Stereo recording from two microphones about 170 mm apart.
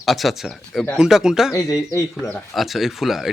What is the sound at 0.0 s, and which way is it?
Speech, centre (ahead or behind).